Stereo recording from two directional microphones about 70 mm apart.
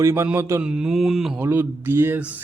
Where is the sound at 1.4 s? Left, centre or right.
Right.